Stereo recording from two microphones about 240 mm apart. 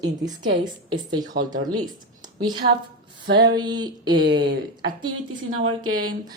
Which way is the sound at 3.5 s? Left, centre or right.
Centre.